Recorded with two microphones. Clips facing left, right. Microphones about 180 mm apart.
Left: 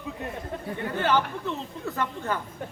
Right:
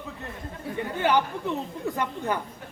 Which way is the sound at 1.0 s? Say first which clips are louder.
Right 1 dB; 15° right (ahead or behind).